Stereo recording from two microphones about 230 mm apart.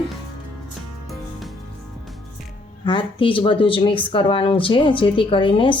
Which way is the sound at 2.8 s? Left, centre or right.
Left.